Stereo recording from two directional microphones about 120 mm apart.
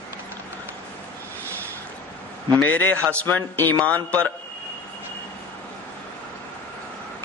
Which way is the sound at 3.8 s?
10° left (ahead or behind).